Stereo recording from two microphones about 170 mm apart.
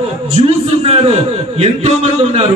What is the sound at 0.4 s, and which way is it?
A man's voice, 35° right (ahead or behind).